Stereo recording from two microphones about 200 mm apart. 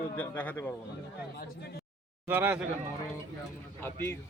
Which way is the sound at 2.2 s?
10° right (ahead or behind).